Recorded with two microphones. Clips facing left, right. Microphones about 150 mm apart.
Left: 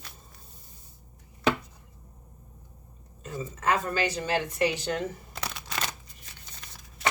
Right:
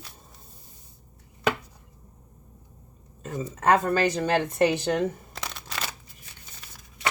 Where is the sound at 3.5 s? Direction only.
55° right (ahead or behind).